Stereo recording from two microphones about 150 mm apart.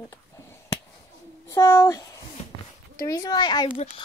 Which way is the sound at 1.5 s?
20° left (ahead or behind).